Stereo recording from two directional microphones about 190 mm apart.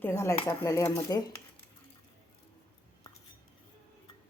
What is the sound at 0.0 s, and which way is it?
A woman's voice, 15° left (ahead or behind).